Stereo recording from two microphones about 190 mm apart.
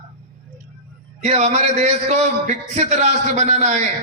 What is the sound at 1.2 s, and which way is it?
A man's voice, 35° right (ahead or behind).